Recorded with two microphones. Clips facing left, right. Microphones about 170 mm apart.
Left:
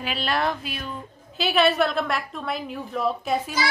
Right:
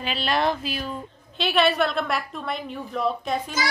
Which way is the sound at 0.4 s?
30° right (ahead or behind).